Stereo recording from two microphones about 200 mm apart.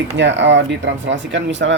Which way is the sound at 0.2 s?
65° right (ahead or behind).